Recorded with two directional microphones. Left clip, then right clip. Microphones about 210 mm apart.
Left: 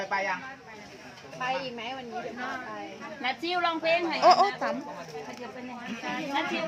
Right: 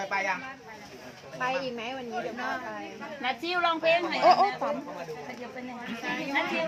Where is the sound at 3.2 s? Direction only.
10° left (ahead or behind).